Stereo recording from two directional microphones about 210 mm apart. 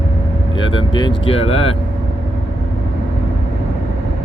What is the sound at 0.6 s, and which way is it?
Speech, 25° left (ahead or behind).